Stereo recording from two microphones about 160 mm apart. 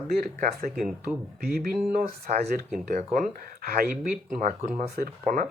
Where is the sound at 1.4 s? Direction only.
75° right (ahead or behind).